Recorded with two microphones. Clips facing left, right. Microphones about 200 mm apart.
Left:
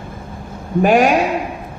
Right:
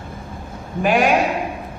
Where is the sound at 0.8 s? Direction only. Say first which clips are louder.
Left 4 dB; 45° left (ahead or behind).